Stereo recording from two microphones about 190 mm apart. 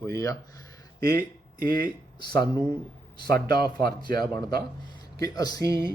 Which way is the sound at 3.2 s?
55° right (ahead or behind).